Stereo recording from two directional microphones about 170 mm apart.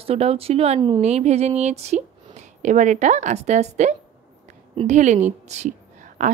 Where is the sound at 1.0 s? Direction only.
40° right (ahead or behind).